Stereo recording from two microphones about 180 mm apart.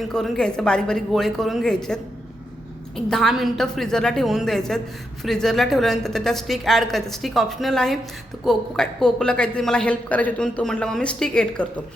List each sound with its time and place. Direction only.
0.0 s a woman's voice: centre (ahead or behind)